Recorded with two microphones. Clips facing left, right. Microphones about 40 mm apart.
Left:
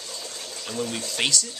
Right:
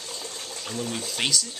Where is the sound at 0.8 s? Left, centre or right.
Centre.